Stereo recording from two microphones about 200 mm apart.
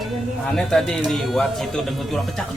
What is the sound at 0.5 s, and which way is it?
Speech, 5° left (ahead or behind).